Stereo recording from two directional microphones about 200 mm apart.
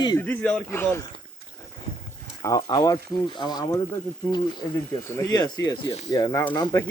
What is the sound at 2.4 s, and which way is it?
Speech, 20° left (ahead or behind).